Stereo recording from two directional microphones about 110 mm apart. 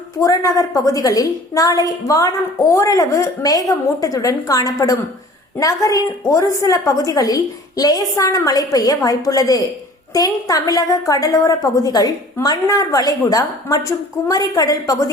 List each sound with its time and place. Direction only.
0.2 s a woman's voice: 30° left (ahead or behind)